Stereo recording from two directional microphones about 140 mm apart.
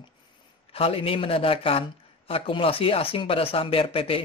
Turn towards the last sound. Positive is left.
turn(degrees=40)  # may be behind; listen again after turning